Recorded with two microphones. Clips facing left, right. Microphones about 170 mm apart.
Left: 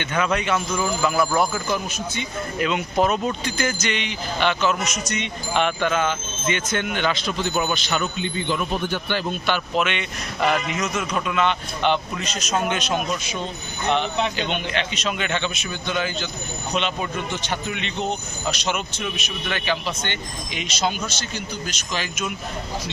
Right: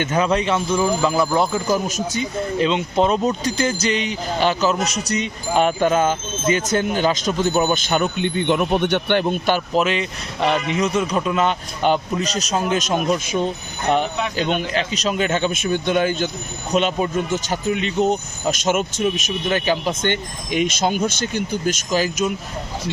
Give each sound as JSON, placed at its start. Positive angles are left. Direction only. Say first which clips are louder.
{"t": 0.0, "sound": "speech", "louder": "right 4 dB", "side_deg": -35}
{"t": 1.6, "sound": "speech", "louder": "right 5 dB", "side_deg": -40}
{"t": 2.6, "sound": "a man's voice", "louder": "right 3 dB", "side_deg": -25}
{"t": 9.2, "sound": "speech", "louder": "right 5 dB", "side_deg": -40}